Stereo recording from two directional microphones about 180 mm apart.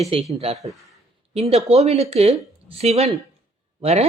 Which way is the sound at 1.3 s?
35° right (ahead or behind).